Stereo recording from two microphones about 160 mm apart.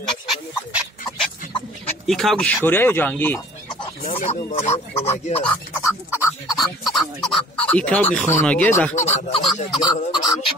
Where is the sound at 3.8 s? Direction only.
35° left (ahead or behind).